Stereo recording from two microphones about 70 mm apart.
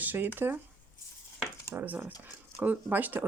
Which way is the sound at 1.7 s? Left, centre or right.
Right.